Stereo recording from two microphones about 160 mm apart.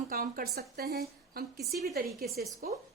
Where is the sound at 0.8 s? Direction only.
85° right.